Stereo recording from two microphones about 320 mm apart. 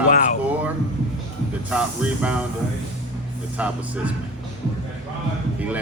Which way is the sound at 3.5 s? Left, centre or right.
Centre.